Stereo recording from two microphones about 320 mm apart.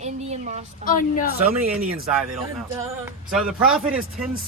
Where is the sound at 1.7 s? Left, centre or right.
Centre.